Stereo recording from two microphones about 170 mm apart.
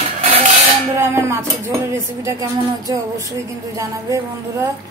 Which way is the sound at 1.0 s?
15° right (ahead or behind).